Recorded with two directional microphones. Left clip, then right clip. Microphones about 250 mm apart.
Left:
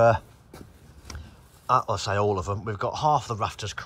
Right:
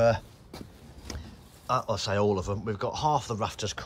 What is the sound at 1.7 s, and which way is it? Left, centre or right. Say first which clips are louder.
Speech: left 5 dB; centre.